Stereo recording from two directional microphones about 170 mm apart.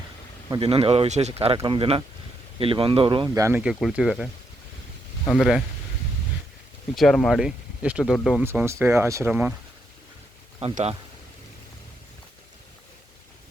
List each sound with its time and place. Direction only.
0.6 s speech: 35° right (ahead or behind); by 3.6 s 20° right (ahead or behind)
3.6 s speech: centre (ahead or behind)
5.4 s speech: centre (ahead or behind)
6.9 s speech: centre (ahead or behind)
8.4 s speech: 15° right (ahead or behind)
10.6 s speech: 35° right (ahead or behind)